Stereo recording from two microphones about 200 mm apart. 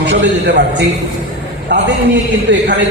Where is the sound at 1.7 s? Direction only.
60° right (ahead or behind).